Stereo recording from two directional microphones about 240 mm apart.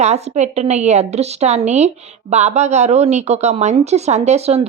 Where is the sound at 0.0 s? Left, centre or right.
Right.